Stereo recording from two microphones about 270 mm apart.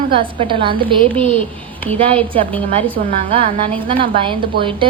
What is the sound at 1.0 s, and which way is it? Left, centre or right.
Speech, centre.